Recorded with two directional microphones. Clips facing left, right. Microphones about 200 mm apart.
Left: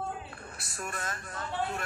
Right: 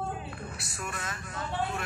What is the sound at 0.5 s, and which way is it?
Speech, 45° left (ahead or behind).